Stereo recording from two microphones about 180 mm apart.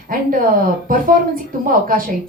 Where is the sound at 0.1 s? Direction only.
50° right (ahead or behind).